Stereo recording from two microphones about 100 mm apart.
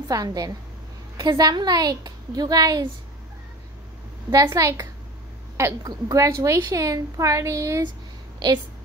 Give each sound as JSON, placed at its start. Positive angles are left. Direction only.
{"t": 0.1, "sound": "a woman's voice", "side_deg": -40}
{"t": 4.3, "sound": "a woman's voice", "side_deg": -35}
{"t": 5.9, "sound": "a woman's voice", "side_deg": -35}